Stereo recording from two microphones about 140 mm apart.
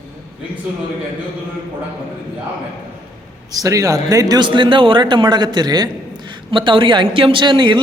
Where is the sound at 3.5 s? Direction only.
25° right (ahead or behind).